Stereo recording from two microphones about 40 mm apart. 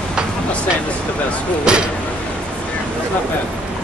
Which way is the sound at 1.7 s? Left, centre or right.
Right.